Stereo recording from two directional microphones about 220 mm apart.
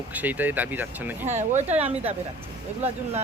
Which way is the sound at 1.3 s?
30° right (ahead or behind).